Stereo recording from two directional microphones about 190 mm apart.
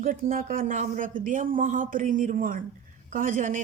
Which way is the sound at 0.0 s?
45° right (ahead or behind).